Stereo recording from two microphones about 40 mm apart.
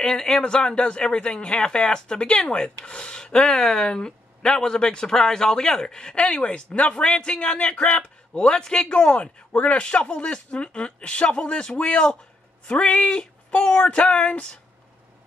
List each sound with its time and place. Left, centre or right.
0.0 s speech: centre; by 6.9 s left
6.9 s speech: left